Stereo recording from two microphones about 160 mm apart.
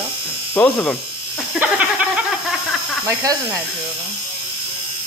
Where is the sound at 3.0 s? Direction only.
20° right (ahead or behind).